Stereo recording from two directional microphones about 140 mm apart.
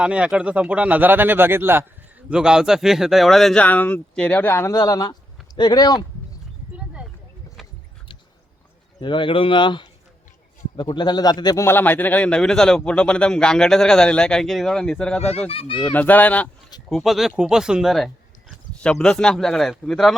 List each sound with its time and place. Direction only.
0.0 s speech: 5° right (ahead or behind)
2.3 s a man's voice: 5° right (ahead or behind); by 6.1 s 30° left (ahead or behind)
6.7 s a sound: 5° right (ahead or behind)
9.0 s a man's voice: 35° left (ahead or behind)
11.6 s a man's voice: 15° left (ahead or behind)
15.4 s speech: 40° left (ahead or behind)
15.8 s a man's voice: 10° left (ahead or behind)
16.9 s speech: centre (ahead or behind)